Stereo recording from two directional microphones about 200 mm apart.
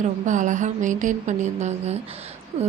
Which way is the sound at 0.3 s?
40° right (ahead or behind).